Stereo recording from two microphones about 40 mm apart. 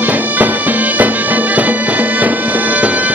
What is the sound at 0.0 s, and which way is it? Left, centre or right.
Music, right.